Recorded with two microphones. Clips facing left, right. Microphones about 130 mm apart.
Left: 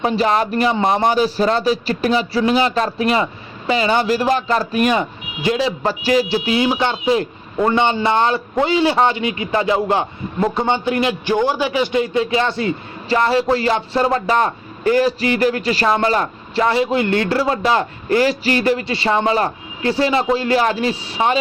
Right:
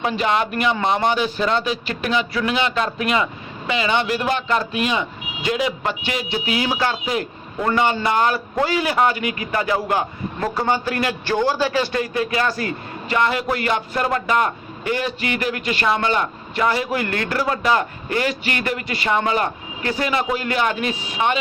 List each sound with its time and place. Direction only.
0.0 s speech: 35° left (ahead or behind)
5.5 s a man's voice: 30° left (ahead or behind)